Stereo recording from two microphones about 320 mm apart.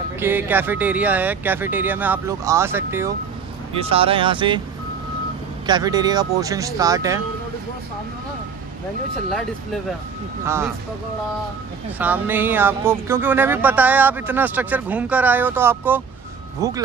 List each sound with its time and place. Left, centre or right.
0.2 s speech: centre
5.7 s speech: centre
10.4 s speech: centre
12.0 s speech: centre